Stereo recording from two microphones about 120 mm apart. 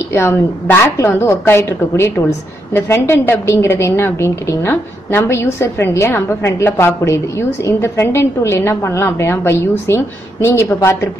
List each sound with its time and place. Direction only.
0.1 s a woman's voice: 20° left (ahead or behind)